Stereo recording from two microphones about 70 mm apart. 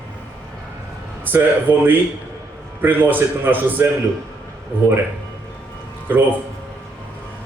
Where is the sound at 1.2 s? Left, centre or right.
Right.